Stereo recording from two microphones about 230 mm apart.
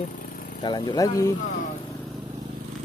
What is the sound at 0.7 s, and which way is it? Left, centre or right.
Speech, centre.